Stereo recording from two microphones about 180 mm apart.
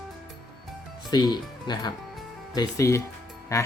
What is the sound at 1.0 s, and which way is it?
Speech, 25° left (ahead or behind).